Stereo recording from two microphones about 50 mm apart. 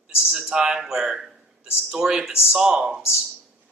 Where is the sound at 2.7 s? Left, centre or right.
Right.